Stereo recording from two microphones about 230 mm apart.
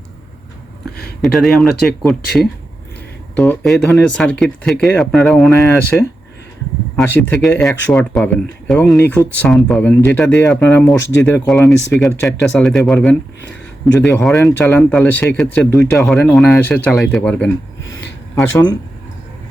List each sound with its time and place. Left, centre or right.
1.2 s speech: centre
6.9 s speech: centre